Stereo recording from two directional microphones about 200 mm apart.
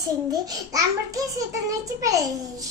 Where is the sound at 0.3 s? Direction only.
20° right (ahead or behind).